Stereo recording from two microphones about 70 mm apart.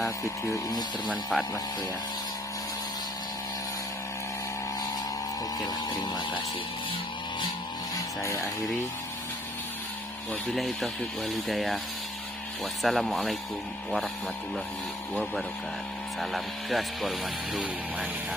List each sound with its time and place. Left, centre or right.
0.2 s speech: left
1.3 s speech: centre
7.9 s a sound: left
10.5 s speech: centre
12.8 s speech: centre
16.2 s speech: centre